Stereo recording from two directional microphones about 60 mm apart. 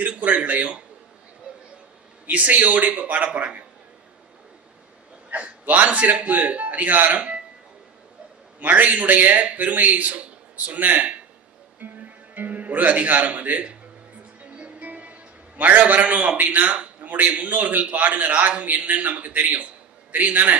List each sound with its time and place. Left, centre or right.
0.0 s a man's voice: right
2.2 s a man's voice: right
5.3 s a man's voice: right
8.5 s a man's voice: right
11.8 s music: right
12.4 s a man's voice: right